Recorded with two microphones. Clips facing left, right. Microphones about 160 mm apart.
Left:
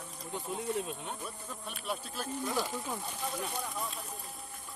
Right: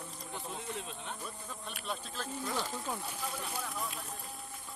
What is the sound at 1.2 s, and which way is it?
Music, 5° left (ahead or behind).